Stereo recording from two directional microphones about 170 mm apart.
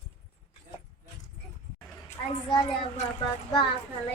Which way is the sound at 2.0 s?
30° left (ahead or behind).